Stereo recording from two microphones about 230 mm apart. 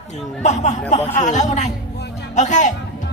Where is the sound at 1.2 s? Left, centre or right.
Left.